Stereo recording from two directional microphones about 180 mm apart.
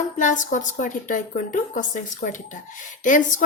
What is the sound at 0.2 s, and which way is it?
A woman's voice, 45° left (ahead or behind).